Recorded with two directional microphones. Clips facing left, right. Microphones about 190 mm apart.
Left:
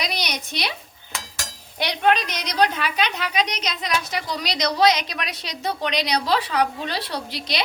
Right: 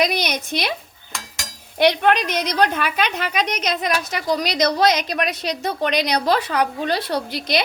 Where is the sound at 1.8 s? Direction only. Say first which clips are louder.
Right 4 dB; 55° right (ahead or behind).